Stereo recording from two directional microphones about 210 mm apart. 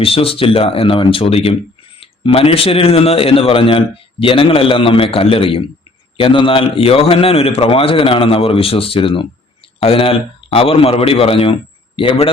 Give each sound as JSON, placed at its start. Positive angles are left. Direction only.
{"t": 0.0, "sound": "a man's voice", "side_deg": 25}